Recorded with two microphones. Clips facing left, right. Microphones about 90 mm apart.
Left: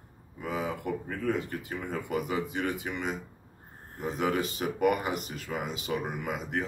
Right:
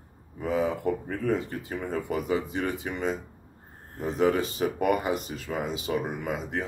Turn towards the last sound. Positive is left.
turn(degrees=-25)  # may be behind; listen again after turning